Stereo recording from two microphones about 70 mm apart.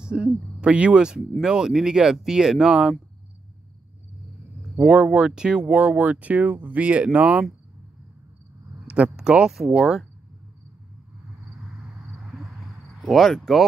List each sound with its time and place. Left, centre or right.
0.0 s speech: centre
4.8 s speech: centre
8.8 s speech: centre
13.0 s speech: centre